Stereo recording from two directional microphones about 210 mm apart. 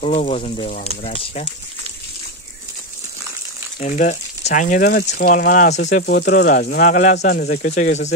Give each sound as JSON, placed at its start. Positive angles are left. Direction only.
{"t": 0.0, "sound": "speech", "side_deg": 35}
{"t": 3.8, "sound": "speech", "side_deg": 35}